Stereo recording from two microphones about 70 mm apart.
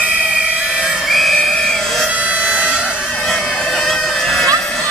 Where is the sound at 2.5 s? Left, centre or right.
Centre.